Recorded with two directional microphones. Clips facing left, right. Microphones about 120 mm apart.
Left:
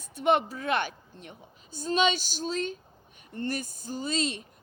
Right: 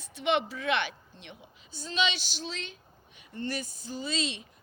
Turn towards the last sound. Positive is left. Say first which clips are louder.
# left 3 dB
turn(degrees=45)  # may be behind; listen again after turning